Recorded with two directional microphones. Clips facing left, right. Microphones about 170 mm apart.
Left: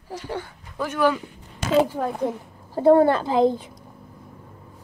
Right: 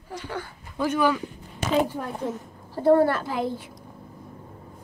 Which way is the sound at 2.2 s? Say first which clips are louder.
Left 3 dB; 20° left (ahead or behind).